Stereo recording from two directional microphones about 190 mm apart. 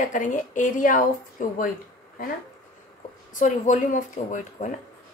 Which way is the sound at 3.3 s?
40° left (ahead or behind).